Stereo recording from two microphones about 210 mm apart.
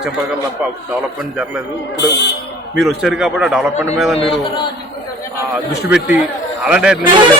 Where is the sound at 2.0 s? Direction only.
55° left (ahead or behind).